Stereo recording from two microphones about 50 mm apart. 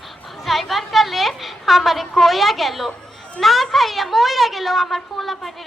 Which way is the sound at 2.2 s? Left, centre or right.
Centre.